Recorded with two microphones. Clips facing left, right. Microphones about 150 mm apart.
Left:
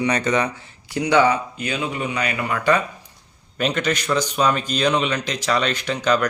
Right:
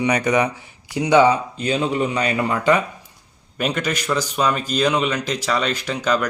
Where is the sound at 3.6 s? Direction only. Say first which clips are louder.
Left 1 dB; 5° right (ahead or behind).